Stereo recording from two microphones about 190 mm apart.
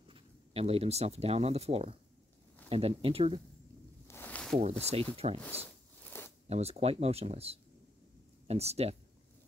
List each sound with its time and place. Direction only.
0.1 s speech: 30° right (ahead or behind)
4.1 s a sound: 10° left (ahead or behind)
4.6 s speech: 35° right (ahead or behind)
6.1 s zipper: 10° left (ahead or behind)
6.5 s speech: 35° right (ahead or behind)